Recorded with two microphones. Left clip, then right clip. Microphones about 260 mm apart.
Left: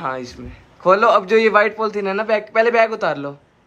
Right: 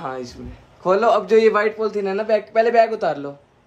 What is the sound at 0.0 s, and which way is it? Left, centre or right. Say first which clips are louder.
A man's voice: left 4 dB; centre.